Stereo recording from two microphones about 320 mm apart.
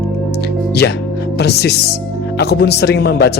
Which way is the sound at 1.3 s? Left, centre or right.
Left.